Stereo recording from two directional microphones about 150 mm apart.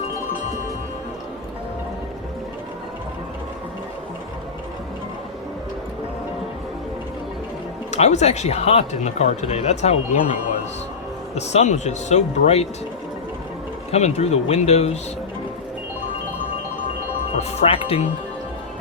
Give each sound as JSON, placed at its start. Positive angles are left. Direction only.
{"t": 7.9, "sound": "speech", "side_deg": 50}
{"t": 11.3, "sound": "speech", "side_deg": 50}
{"t": 13.9, "sound": "speech", "side_deg": 45}
{"t": 17.6, "sound": "speech", "side_deg": 40}